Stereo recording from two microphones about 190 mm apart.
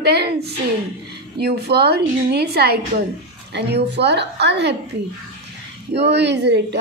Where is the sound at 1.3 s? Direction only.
60° right (ahead or behind).